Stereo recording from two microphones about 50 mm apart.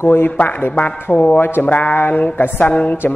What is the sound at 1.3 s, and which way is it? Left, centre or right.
Speech, left.